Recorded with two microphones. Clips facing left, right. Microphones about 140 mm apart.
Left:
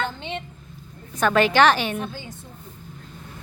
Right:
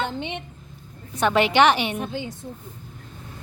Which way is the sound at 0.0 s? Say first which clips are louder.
Right 1 dB; 20° right (ahead or behind).